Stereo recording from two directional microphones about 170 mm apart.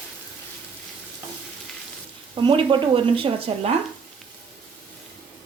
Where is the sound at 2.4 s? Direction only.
30° right (ahead or behind).